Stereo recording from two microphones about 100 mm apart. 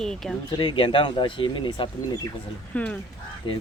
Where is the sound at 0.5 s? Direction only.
55° left (ahead or behind).